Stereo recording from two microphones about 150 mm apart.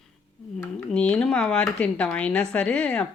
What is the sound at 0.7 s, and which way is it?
Speech, 5° left (ahead or behind).